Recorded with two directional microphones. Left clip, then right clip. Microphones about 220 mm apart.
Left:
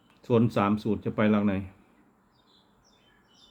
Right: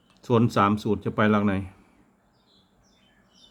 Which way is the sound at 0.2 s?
15° right (ahead or behind).